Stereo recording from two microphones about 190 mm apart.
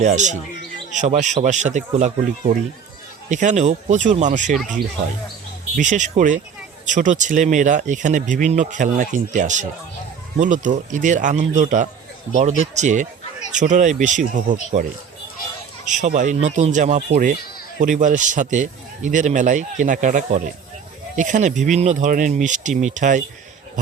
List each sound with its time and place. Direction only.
0.0 s speech: 40° right (ahead or behind)
3.2 s speech: 40° right (ahead or behind)
5.7 s speech: 40° right (ahead or behind)
15.9 s speech: 40° right (ahead or behind)